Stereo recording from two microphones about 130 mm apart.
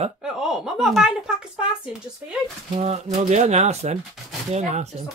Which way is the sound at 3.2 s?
60° right (ahead or behind).